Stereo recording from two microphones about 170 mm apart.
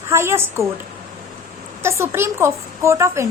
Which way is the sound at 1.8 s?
15° right (ahead or behind).